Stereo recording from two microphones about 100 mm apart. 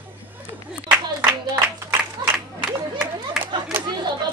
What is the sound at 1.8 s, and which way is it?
Music, 25° right (ahead or behind).